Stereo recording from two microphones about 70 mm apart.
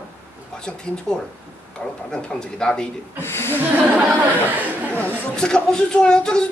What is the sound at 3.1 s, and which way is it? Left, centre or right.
Speech, left.